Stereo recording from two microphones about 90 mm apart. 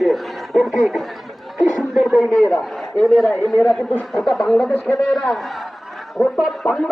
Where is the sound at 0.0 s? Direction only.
Centre (ahead or behind).